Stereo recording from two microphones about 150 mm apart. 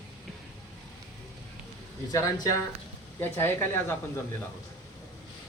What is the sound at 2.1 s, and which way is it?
Speech, 25° left (ahead or behind).